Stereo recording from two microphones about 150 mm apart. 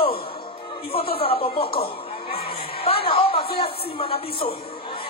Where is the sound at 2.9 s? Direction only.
40° left (ahead or behind).